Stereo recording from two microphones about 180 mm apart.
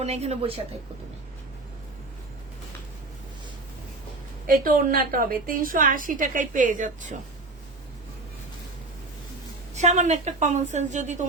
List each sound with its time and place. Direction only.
0.0 s a woman's voice: 35° right (ahead or behind)
4.4 s a woman's voice: 50° right (ahead or behind)
9.7 s a woman's voice: 40° right (ahead or behind)